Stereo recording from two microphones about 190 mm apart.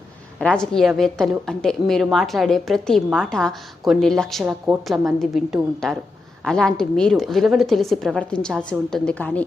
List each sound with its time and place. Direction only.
0.3 s a woman's voice: 5° left (ahead or behind)